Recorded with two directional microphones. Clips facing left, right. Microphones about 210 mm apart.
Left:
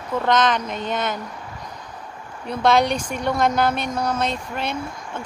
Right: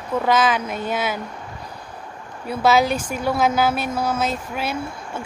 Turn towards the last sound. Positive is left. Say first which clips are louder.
# right 1 dB
turn(degrees=-5)  # may be behind; listen again after turning